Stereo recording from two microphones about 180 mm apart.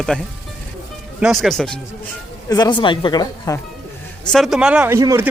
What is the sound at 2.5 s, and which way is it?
Speech, 25° left (ahead or behind).